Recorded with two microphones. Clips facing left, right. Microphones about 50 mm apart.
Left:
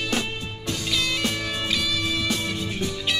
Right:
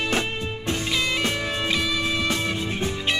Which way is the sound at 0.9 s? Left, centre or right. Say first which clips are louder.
Even; right.